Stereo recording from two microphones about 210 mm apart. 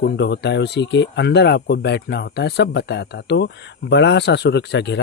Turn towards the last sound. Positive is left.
turn(degrees=55)  # may be behind; listen again after turning